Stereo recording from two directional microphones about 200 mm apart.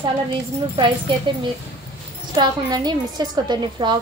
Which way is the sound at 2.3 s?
20° right (ahead or behind).